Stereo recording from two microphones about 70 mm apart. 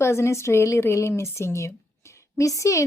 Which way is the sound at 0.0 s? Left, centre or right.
Left.